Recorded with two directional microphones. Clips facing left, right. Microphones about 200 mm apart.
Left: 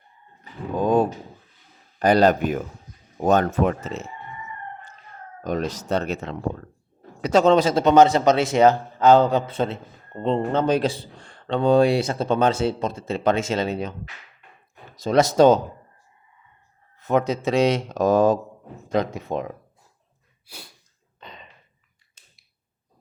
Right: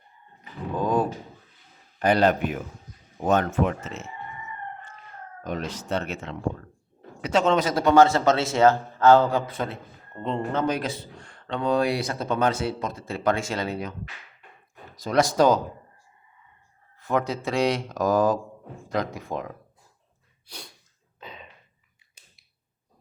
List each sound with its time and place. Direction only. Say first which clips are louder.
0.8 s a sound: left 5 dB; 20° left (ahead or behind)
2.0 s speech: left 4 dB; 40° left (ahead or behind)
5.4 s a man's voice: left 5 dB; 40° left (ahead or behind); by 13.9 s 25° left (ahead or behind)
14.9 s a man's voice: left 4 dB; 25° left (ahead or behind)
17.0 s a man's voice: left 4 dB; 20° left (ahead or behind)
20.5 s sneeze: even; 5° left (ahead or behind)
21.2 s a sound: right 1 dB; 5° right (ahead or behind)